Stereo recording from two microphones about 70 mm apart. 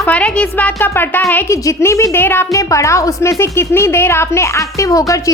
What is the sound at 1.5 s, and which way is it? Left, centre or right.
Speech, left.